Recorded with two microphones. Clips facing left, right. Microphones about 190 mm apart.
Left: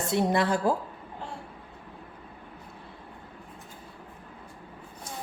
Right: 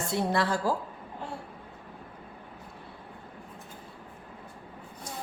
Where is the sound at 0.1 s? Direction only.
20° left (ahead or behind).